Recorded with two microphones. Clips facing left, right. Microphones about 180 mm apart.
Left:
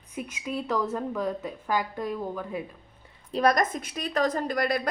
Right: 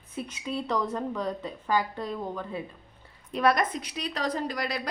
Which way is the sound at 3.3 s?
40° left (ahead or behind).